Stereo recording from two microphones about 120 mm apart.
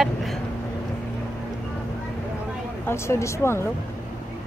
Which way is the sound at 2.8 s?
20° left (ahead or behind).